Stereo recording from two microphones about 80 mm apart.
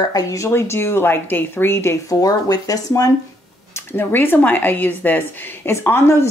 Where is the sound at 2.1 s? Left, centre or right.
Left.